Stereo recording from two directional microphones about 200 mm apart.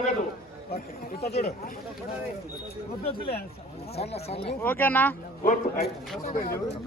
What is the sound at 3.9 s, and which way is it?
Speech, 30° left (ahead or behind).